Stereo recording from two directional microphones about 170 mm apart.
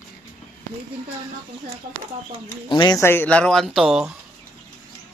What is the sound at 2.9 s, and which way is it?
Speech, 15° left (ahead or behind).